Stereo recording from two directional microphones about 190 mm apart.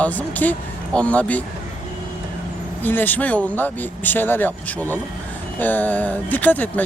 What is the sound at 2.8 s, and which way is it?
Speech, 10° left (ahead or behind).